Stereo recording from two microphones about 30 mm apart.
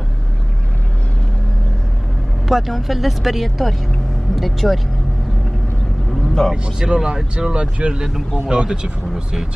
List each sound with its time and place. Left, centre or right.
2.4 s speech: centre
6.4 s speech: centre
6.8 s speech: right
7.8 s speech: right